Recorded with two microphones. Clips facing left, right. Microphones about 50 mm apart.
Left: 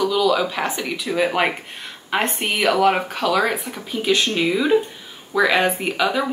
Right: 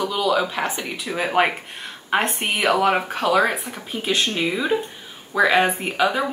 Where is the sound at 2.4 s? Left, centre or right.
Centre.